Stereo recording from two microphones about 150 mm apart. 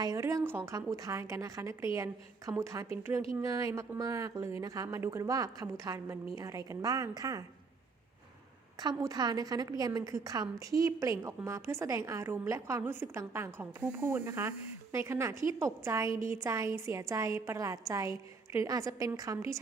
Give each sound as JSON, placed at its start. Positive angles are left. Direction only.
{"t": 0.0, "sound": "a woman's voice", "side_deg": -20}
{"t": 8.8, "sound": "a woman's voice", "side_deg": -25}